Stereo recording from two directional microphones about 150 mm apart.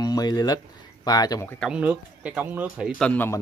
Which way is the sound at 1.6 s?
10° right (ahead or behind).